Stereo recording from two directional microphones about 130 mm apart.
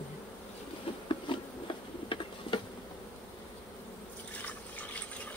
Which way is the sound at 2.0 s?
40° left (ahead or behind).